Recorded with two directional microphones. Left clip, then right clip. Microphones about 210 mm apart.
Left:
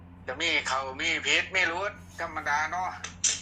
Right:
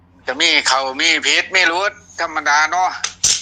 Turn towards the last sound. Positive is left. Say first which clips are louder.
# right 12 dB
turn(degrees=-55)  # may be behind; listen again after turning